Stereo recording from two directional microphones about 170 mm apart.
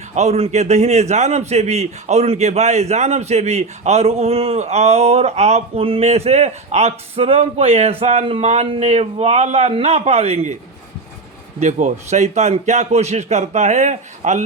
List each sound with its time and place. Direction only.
0.1 s a man's voice: 40° right (ahead or behind)
11.6 s a man's voice: 45° right (ahead or behind)